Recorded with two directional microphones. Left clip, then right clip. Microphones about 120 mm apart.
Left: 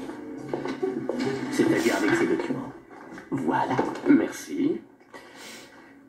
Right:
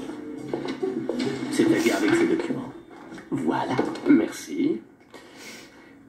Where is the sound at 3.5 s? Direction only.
15° right (ahead or behind).